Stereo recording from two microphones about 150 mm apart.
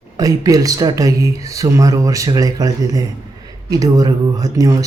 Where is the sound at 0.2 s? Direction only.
25° right (ahead or behind).